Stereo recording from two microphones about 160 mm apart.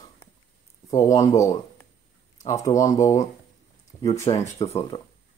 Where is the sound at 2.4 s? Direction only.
20° left (ahead or behind).